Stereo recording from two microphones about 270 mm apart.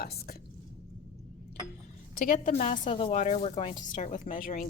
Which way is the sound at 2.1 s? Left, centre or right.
Left.